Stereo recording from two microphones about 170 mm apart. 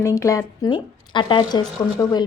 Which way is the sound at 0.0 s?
15° left (ahead or behind).